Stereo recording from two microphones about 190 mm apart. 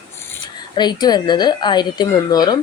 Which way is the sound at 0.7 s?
25° left (ahead or behind).